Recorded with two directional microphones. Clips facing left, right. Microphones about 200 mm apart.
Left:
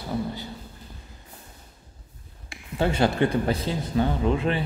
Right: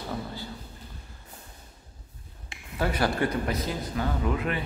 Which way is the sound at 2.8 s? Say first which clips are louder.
Left 4 dB; 25° left (ahead or behind).